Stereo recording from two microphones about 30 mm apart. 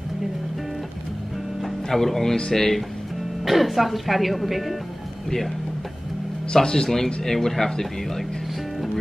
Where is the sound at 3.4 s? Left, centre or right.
Centre.